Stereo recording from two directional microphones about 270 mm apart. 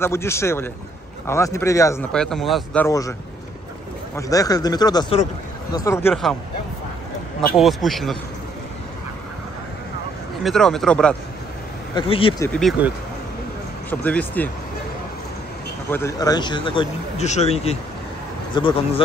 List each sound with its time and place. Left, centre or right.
0.0 s speech: centre
7.5 s speech: centre
10.4 s speech: centre
11.9 s speech: centre
12.5 s speech: centre
15.9 s speech: centre